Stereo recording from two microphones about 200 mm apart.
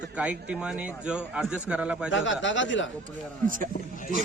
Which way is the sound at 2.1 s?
70° left (ahead or behind).